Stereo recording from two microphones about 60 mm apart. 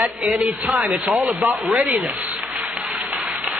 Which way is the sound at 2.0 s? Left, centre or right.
Centre.